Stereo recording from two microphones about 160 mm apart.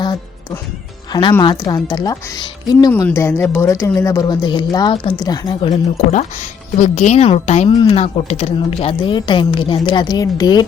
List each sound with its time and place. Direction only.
1.4 s speech: 25° left (ahead or behind)
2.9 s speech: 15° left (ahead or behind)
6.1 s a woman's voice: 50° left (ahead or behind)
7.7 s a woman's voice: 30° left (ahead or behind)